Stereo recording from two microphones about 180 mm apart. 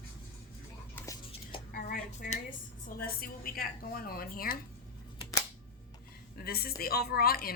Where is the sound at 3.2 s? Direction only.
55° left (ahead or behind).